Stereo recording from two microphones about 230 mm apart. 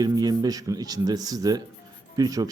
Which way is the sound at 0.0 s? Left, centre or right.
Centre.